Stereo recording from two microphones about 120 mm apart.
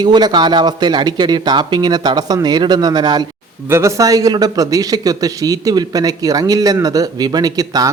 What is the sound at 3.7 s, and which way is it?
A man's voice, 25° right (ahead or behind).